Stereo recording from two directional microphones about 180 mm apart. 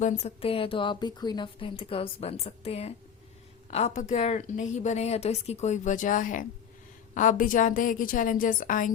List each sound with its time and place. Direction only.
0.0 s a woman's voice: 40° left (ahead or behind)